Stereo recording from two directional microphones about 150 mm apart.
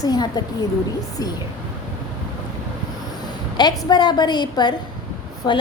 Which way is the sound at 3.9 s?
30° left (ahead or behind).